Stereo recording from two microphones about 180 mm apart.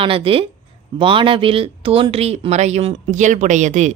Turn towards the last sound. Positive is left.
turn(degrees=-40)  # may be behind; listen again after turning